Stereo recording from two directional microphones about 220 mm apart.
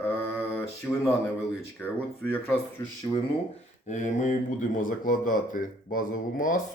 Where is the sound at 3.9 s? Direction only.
35° left (ahead or behind).